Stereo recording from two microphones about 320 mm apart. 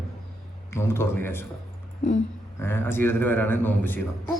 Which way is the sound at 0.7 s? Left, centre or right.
Centre.